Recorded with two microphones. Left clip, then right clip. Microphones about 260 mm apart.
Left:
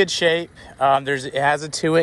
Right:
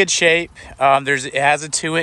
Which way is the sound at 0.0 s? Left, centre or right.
Centre.